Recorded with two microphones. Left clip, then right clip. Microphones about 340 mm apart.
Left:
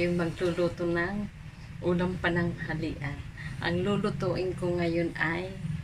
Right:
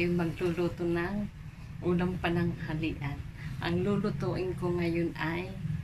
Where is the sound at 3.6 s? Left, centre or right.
Centre.